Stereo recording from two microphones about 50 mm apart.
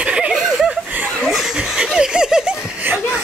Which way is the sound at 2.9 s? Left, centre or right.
Right.